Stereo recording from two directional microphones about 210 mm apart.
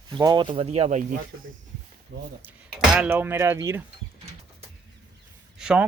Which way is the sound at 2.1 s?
55° right (ahead or behind).